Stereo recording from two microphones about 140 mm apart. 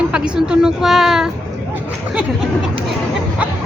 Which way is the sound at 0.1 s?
5° right (ahead or behind).